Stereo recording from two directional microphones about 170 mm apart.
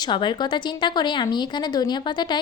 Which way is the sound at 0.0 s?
25° left (ahead or behind).